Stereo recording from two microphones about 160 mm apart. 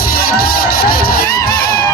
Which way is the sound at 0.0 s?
70° left (ahead or behind).